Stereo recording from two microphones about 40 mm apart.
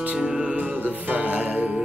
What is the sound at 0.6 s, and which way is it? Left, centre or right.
Music, right.